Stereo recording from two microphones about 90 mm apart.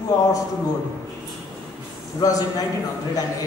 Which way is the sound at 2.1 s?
45° left (ahead or behind).